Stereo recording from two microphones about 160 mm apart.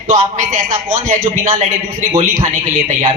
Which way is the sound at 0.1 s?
50° right (ahead or behind).